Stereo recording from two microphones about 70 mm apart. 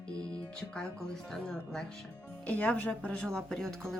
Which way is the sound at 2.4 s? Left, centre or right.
Left.